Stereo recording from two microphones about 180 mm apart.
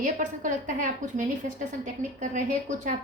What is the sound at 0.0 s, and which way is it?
A woman's voice, 45° right (ahead or behind).